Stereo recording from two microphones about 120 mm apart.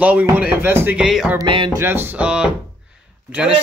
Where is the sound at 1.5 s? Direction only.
45° right (ahead or behind).